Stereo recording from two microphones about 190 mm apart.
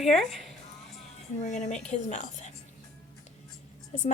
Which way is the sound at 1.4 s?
35° left (ahead or behind).